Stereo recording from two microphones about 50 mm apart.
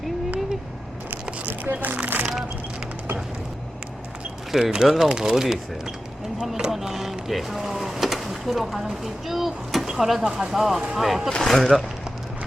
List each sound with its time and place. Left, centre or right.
1.1 s a sound: right
4.6 s speech: centre
11.3 s speech: centre